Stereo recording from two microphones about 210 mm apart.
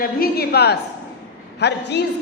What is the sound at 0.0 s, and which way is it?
A woman's voice, 45° left (ahead or behind).